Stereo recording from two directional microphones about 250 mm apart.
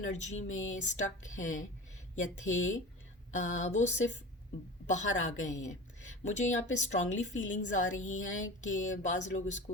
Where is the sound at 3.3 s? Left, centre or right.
Left.